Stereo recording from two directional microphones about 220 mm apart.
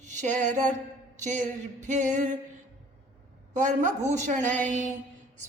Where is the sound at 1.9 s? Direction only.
35° right (ahead or behind).